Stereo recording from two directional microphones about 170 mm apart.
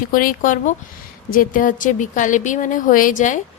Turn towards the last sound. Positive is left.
turn(degrees=50)  # may be behind; listen again after turning